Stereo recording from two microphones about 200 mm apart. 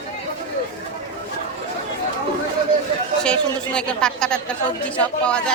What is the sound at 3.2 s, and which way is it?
Speech, 5° left (ahead or behind).